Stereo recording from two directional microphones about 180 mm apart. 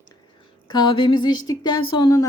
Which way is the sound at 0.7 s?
25° left (ahead or behind).